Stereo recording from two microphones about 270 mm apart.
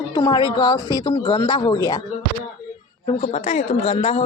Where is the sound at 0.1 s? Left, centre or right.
Centre.